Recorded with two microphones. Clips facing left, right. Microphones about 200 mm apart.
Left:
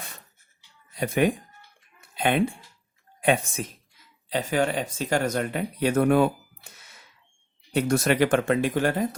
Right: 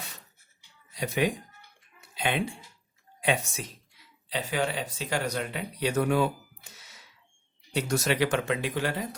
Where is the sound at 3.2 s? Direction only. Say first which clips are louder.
Left 5 dB; 55° left (ahead or behind).